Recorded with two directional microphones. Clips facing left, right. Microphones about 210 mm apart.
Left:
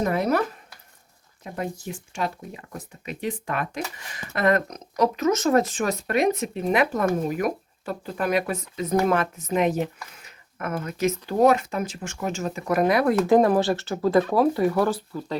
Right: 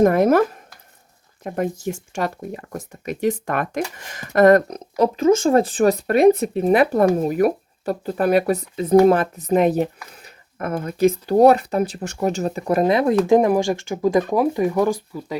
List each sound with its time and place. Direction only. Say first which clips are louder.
0.0 s speech: right 8 dB; 50° right (ahead or behind)
1.5 s speech: right 7 dB; 50° right (ahead or behind)
4.7 s speech: right 4 dB; 30° right (ahead or behind); by 15.4 s 10° right (ahead or behind)